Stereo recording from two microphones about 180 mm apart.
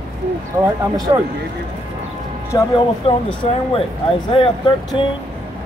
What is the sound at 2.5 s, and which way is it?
Speech, 25° left (ahead or behind).